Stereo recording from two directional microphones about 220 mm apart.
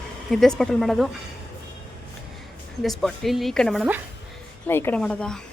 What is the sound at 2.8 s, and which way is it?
A woman's voice, centre (ahead or behind).